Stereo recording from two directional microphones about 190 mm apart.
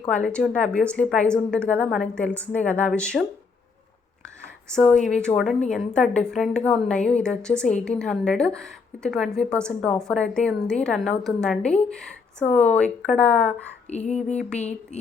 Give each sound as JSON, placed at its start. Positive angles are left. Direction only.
{"t": 0.1, "sound": "a woman's voice", "side_deg": 5}
{"t": 4.7, "sound": "a woman's voice", "side_deg": 5}
{"t": 13.9, "sound": "a sound", "side_deg": 35}